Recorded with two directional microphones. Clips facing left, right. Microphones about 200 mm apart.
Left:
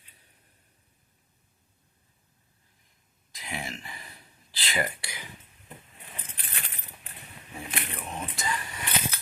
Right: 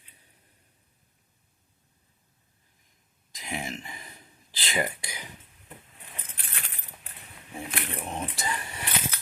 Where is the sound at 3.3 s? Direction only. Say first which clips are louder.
Right 3 dB; 20° right (ahead or behind).